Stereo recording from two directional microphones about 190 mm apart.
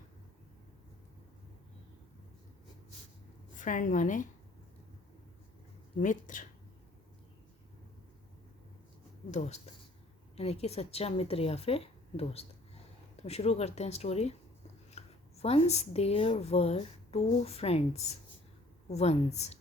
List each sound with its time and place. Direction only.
3.6 s a woman's voice: 40° left (ahead or behind)
6.0 s a woman's voice: 45° left (ahead or behind)
9.3 s a woman's voice: 35° left (ahead or behind)